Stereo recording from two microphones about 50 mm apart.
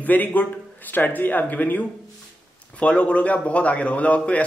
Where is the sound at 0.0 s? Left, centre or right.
Left.